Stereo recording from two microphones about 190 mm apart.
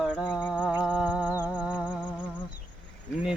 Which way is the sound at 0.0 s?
5° right (ahead or behind).